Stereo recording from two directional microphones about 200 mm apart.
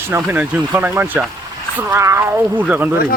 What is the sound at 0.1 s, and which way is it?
Speech, 10° right (ahead or behind).